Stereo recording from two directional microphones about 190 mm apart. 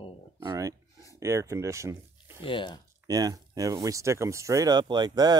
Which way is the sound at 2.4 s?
25° left (ahead or behind).